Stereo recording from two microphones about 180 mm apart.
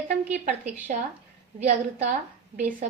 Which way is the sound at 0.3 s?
40° right (ahead or behind).